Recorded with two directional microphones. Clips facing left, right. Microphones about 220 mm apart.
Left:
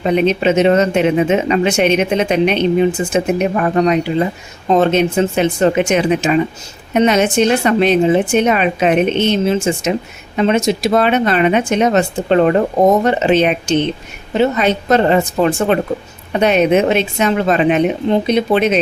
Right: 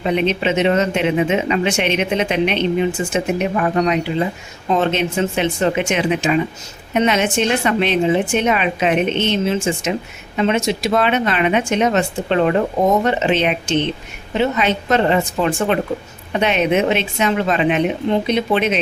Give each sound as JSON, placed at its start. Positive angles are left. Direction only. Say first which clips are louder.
{"t": 0.0, "sound": "speech", "louder": "left 4 dB", "side_deg": 40}